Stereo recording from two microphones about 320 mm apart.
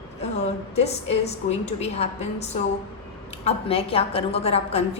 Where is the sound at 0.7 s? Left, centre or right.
Centre.